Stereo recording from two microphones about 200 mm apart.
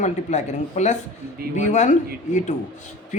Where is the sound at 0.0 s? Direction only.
35° left (ahead or behind).